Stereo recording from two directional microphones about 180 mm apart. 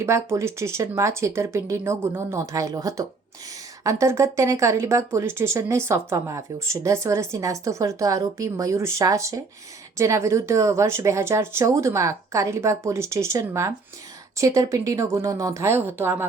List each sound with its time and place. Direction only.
0.0 s speech: 15° right (ahead or behind)